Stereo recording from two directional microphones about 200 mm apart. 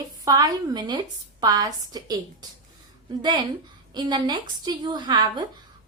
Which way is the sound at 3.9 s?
20° right (ahead or behind).